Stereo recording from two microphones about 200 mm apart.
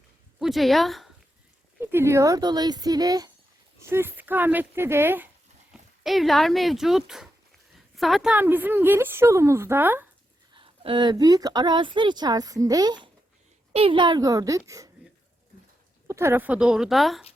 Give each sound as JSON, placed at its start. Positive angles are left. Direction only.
{"t": 0.3, "sound": "speech", "side_deg": 0}
{"t": 1.8, "sound": "a woman's voice", "side_deg": -10}
{"t": 10.5, "sound": "a woman's voice", "side_deg": -25}
{"t": 16.0, "sound": "speech", "side_deg": -15}